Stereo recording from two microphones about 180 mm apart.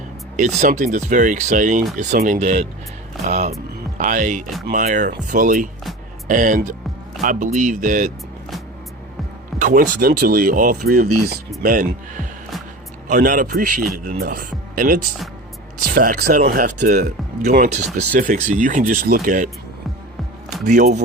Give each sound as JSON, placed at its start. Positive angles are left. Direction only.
{"t": 0.3, "sound": "speech", "side_deg": -45}
{"t": 9.6, "sound": "speech", "side_deg": -45}
{"t": 20.7, "sound": "speech", "side_deg": -45}